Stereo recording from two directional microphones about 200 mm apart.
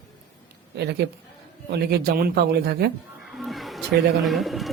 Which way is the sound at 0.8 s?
55° right (ahead or behind).